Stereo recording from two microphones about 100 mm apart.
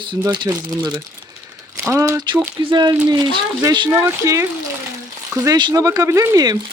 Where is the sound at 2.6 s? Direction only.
45° right (ahead or behind).